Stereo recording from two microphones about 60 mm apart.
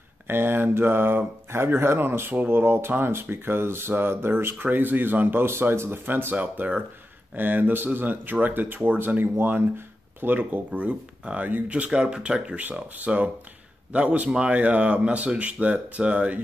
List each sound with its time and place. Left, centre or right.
0.3 s speech: right